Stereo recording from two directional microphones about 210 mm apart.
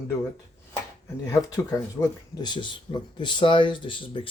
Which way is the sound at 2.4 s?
20° left (ahead or behind).